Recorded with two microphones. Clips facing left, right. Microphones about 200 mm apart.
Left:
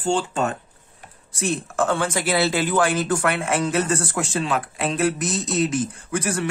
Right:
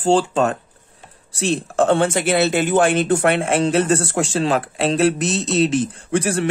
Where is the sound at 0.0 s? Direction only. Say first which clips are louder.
Right 6 dB; 90° right.